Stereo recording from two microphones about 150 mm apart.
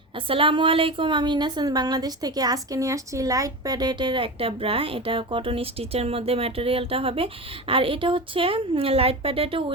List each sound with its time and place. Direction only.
0.3 s a woman's voice: 35° right (ahead or behind)